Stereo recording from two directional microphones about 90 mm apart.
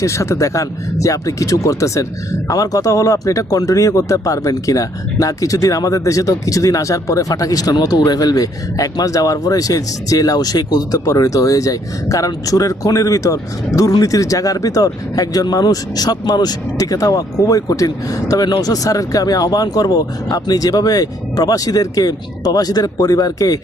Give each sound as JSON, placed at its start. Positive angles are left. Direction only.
{"t": 0.0, "sound": "speech", "side_deg": 35}